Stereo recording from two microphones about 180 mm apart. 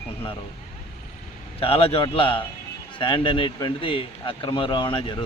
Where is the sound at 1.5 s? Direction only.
30° left (ahead or behind).